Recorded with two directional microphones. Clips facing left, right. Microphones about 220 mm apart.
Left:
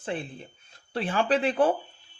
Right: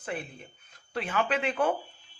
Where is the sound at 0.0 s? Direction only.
30° left (ahead or behind).